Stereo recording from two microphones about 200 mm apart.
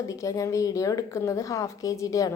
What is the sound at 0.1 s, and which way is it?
A woman's voice, 15° left (ahead or behind).